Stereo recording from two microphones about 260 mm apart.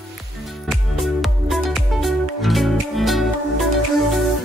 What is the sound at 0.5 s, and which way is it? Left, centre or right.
Music, centre.